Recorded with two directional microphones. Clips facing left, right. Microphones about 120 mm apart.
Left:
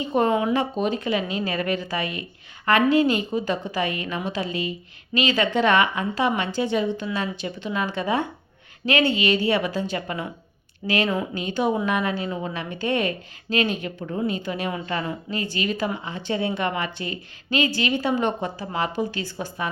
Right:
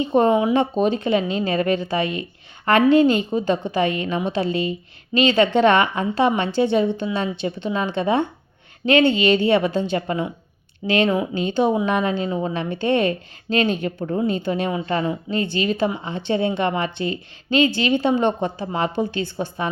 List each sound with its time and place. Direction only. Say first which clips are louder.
0.0 s a woman's voice: right 4 dB; 25° right (ahead or behind)